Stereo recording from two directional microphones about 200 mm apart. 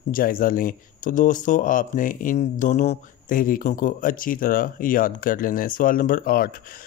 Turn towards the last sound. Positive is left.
turn(degrees=45)  # may be behind; listen again after turning